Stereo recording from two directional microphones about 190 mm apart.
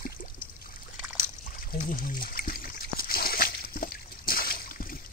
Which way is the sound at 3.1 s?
50° left (ahead or behind).